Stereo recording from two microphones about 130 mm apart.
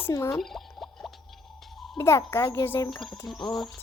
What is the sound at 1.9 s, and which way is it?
Speech, 20° left (ahead or behind).